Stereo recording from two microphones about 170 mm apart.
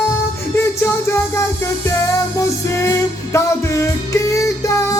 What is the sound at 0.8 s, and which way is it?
Music, 15° left (ahead or behind).